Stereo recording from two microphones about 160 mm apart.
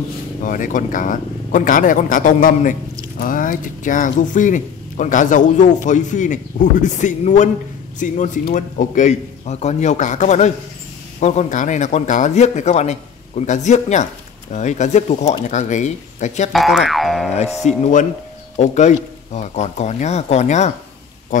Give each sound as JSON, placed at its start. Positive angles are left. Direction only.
{"t": 0.4, "sound": "speech", "side_deg": 55}
{"t": 16.5, "sound": "boing", "side_deg": 0}
{"t": 17.6, "sound": "speech", "side_deg": 45}